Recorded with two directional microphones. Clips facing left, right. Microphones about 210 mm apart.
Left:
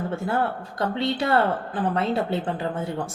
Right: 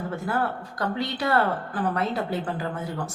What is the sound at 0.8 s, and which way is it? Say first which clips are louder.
Speech: left 3 dB; 25° left (ahead or behind).